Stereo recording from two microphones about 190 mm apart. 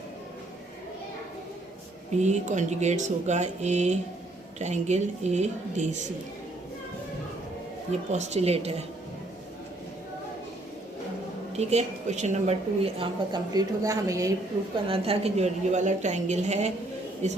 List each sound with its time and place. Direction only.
2.1 s a woman's voice: 40° right (ahead or behind)
8.1 s a woman's voice: 35° right (ahead or behind)
11.5 s a woman's voice: 35° right (ahead or behind); by 14.3 s 15° right (ahead or behind)
14.8 s a woman's voice: 30° right (ahead or behind)